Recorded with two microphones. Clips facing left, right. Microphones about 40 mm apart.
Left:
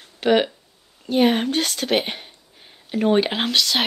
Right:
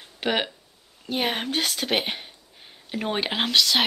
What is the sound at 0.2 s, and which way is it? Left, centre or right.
A woman's voice, centre.